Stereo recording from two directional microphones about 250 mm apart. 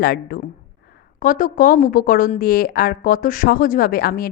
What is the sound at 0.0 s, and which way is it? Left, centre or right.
Speech, left.